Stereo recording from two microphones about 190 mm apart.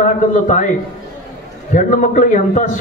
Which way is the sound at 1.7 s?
40° left (ahead or behind).